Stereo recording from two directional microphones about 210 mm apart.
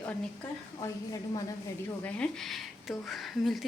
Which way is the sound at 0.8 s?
15° left (ahead or behind).